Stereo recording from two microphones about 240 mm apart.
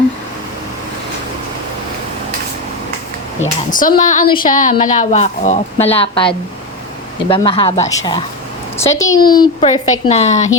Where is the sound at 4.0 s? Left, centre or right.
Left.